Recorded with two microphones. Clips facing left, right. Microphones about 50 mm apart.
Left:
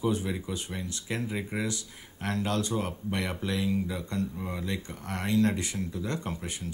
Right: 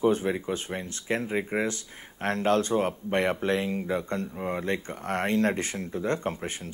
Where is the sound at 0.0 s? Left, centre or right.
Right.